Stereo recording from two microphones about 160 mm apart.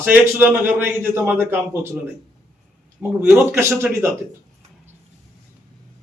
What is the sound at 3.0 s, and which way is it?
Speech, centre (ahead or behind).